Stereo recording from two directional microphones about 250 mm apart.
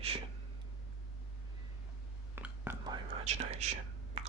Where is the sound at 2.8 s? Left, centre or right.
Right.